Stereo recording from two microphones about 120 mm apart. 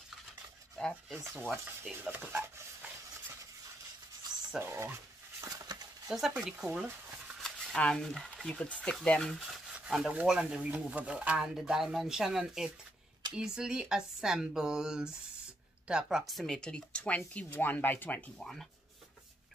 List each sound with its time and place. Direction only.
0.8 s rub: 5° left (ahead or behind)
1.1 s a sound: 15° right (ahead or behind)
4.5 s a sound: 20° right (ahead or behind)
6.0 s speech: 5° right (ahead or behind)
9.3 s speech: 5° right (ahead or behind); by 18.3 s 15° left (ahead or behind)
18.4 s speech: 5° left (ahead or behind)